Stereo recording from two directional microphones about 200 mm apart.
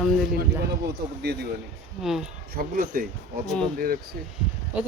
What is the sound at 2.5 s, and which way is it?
Speech, 45° right (ahead or behind).